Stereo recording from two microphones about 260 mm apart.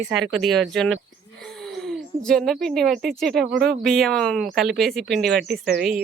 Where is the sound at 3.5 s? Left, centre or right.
Right.